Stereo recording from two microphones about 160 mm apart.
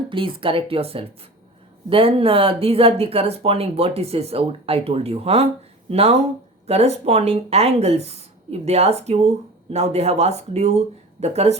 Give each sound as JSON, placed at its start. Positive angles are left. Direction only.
{"t": 0.1, "sound": "speech", "side_deg": -30}